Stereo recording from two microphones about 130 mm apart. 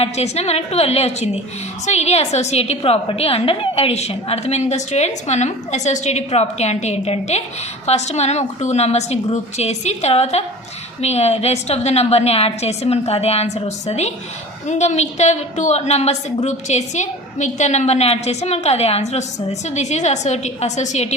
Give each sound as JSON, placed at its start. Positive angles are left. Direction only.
{"t": 0.0, "sound": "a woman's voice", "side_deg": 55}